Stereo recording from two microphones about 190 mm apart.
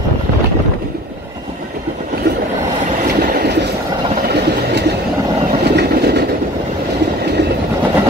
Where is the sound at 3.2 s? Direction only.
55° right (ahead or behind).